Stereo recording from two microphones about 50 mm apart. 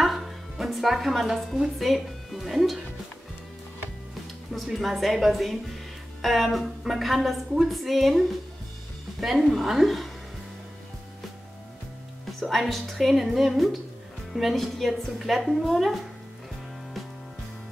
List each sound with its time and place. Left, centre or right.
0.0 s music: centre
1.2 s speech: centre
4.5 s speech: centre
12.4 s speech: centre